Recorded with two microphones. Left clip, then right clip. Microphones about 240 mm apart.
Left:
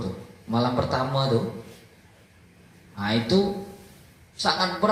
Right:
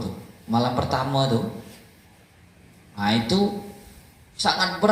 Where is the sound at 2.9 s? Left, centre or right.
Right.